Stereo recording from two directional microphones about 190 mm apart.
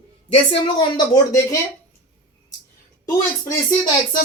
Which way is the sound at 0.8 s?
20° left (ahead or behind).